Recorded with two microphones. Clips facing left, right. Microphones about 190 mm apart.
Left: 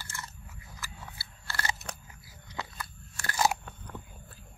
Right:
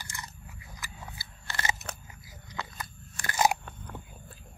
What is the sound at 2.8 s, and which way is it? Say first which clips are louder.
Crunch: right 1 dB; 15° right (ahead or behind).